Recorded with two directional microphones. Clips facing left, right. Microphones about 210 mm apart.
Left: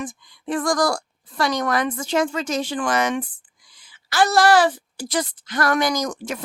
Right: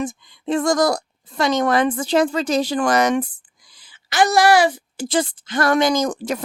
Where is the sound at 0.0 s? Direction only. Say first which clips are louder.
Right 5 dB; 25° right (ahead or behind); by 3.2 s 40° right (ahead or behind).